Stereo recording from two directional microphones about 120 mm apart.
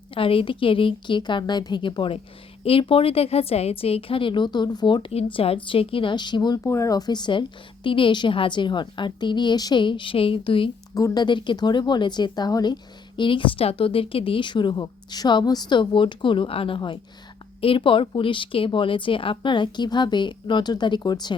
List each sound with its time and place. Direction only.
0.1 s a woman's voice: 50° left (ahead or behind)
5.1 s a woman's voice: 55° left (ahead or behind); by 6.6 s 40° left (ahead or behind)
6.7 s speech: 25° left (ahead or behind); by 10.7 s 45° left (ahead or behind)
10.9 s speech: 30° left (ahead or behind)